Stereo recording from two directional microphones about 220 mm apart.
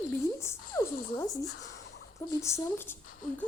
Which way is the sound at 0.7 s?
15° left (ahead or behind).